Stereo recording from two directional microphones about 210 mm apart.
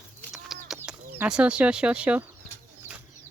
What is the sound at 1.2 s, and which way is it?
Speech, 5° right (ahead or behind).